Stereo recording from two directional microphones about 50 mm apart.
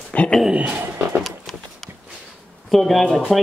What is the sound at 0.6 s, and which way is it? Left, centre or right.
Music, right.